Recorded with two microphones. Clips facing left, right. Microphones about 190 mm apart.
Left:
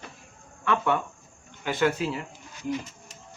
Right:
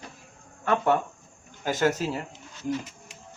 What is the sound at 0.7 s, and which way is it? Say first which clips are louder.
Speech: right 2 dB; 40° right (ahead or behind).